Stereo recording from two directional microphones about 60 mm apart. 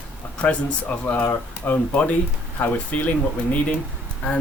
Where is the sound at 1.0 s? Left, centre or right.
Left.